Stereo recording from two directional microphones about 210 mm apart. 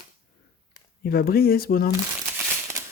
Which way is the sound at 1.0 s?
45° left (ahead or behind).